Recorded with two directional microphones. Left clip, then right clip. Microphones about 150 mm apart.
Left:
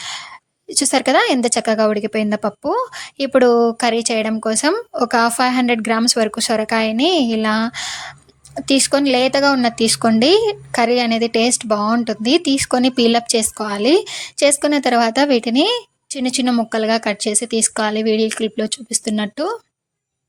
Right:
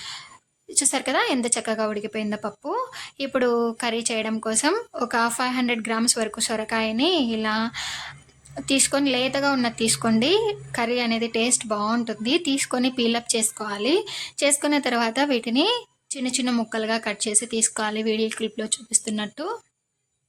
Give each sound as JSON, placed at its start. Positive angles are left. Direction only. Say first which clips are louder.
{"t": 0.7, "sound": "a woman's voice", "louder": "left 9 dB", "side_deg": 40}